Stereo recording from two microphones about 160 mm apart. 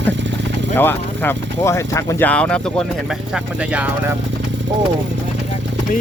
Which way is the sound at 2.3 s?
5° left (ahead or behind).